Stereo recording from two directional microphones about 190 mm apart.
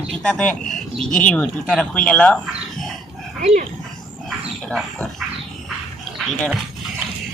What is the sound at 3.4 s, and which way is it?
Speech, 35° right (ahead or behind).